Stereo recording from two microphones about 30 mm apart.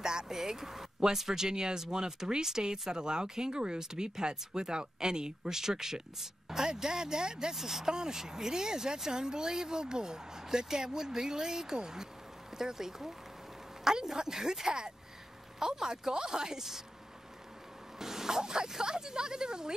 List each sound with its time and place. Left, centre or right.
0.0 s speech: right
7.5 s speech: centre
17.9 s speech: centre